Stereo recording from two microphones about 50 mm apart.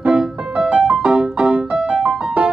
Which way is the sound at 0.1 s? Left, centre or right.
Centre.